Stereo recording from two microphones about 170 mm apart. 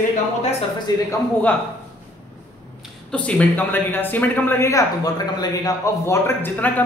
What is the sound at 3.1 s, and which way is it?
A man's voice, 5° left (ahead or behind).